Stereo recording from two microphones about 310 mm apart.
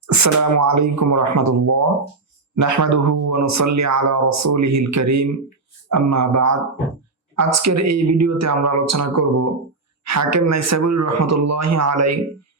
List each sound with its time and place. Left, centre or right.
0.1 s speech: right